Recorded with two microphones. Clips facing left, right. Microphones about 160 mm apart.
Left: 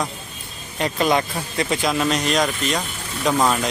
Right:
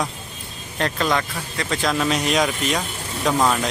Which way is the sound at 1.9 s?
Centre (ahead or behind).